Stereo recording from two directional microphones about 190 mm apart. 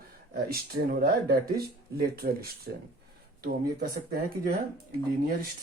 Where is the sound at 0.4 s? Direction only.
50° right (ahead or behind).